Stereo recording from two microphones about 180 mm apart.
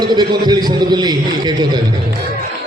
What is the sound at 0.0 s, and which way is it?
A man's voice, 25° right (ahead or behind).